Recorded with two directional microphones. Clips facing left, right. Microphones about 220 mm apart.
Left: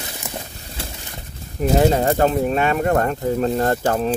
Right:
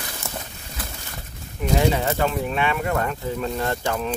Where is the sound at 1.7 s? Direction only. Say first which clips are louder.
Left 5 dB; 45° left (ahead or behind).